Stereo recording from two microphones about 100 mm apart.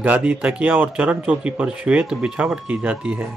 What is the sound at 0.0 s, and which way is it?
Speech, 15° right (ahead or behind).